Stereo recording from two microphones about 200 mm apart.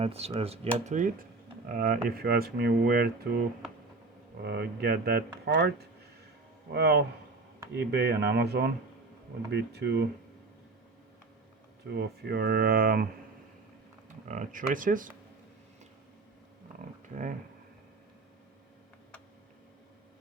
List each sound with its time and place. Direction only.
0.0 s speech: 30° right (ahead or behind); by 3.4 s 50° right (ahead or behind)
4.4 s speech: 55° right (ahead or behind)
6.7 s speech: 55° right (ahead or behind)
11.9 s speech: 55° right (ahead or behind)
14.3 s speech: 40° right (ahead or behind)
17.1 s speech: 35° right (ahead or behind)